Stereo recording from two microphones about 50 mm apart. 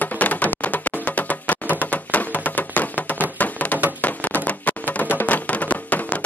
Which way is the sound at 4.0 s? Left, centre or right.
Left.